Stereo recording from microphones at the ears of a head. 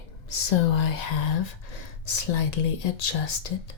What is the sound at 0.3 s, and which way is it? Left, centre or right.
Speech, left.